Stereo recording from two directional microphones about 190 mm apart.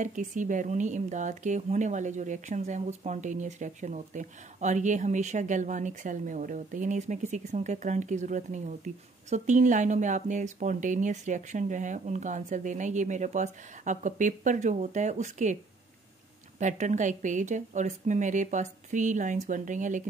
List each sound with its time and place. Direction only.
0.0 s speech: 45° right (ahead or behind)
16.5 s speech: 40° right (ahead or behind)